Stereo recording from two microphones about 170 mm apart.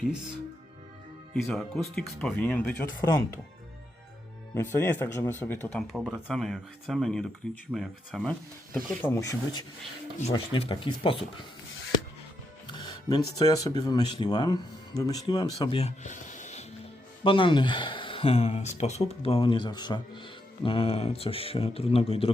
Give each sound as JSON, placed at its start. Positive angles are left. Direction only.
{"t": 1.4, "sound": "speech", "side_deg": 0}
{"t": 4.5, "sound": "speech", "side_deg": 15}
{"t": 5.9, "sound": "speech", "side_deg": -5}
{"t": 12.7, "sound": "speech", "side_deg": 25}
{"t": 15.8, "sound": "a sound", "side_deg": 45}
{"t": 17.2, "sound": "speech", "side_deg": 30}